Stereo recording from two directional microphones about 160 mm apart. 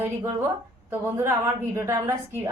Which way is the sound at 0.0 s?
15° right (ahead or behind).